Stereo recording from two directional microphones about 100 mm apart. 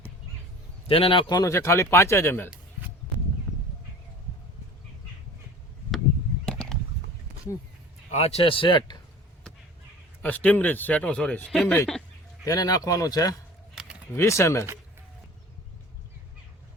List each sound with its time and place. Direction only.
0.9 s speech: 65° left (ahead or behind)
1.3 s speech: 35° left (ahead or behind)
6.4 s a sound: 5° left (ahead or behind)
8.1 s a man's voice: 90° left; by 9.0 s 55° left (ahead or behind)
10.2 s speech: 15° left (ahead or behind)
12.5 s speech: 40° left (ahead or behind)